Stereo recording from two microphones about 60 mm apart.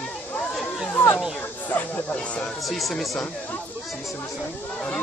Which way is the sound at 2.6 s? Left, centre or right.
Centre.